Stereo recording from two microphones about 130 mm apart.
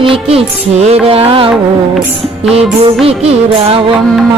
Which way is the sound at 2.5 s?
50° right (ahead or behind).